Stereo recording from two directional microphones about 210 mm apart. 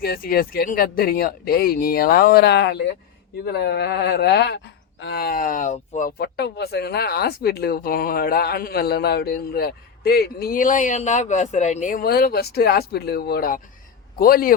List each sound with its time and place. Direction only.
0.0 s speech: 45° left (ahead or behind)